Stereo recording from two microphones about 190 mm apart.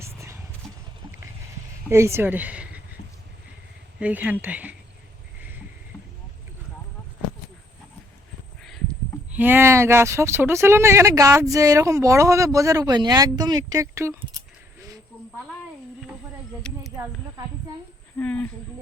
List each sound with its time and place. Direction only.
0.0 s a sound: 15° right (ahead or behind)
1.9 s speech: 15° right (ahead or behind)
4.0 s speech: 10° right (ahead or behind)
9.3 s speech: 10° right (ahead or behind)
16.7 s a sound: 5° left (ahead or behind)
18.2 s speech: 5° left (ahead or behind)